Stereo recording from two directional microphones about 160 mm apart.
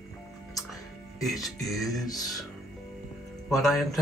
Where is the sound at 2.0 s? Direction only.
25° left (ahead or behind).